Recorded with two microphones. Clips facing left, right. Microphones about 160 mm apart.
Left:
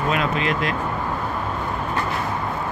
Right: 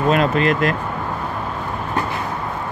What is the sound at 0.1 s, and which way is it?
Speech, 45° right (ahead or behind).